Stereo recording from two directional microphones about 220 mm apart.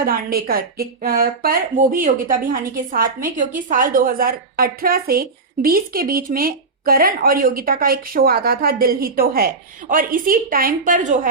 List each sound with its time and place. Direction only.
0.0 s a woman's voice: 40° right (ahead or behind)